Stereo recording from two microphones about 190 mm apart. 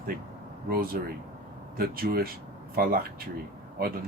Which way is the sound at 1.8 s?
50° right (ahead or behind).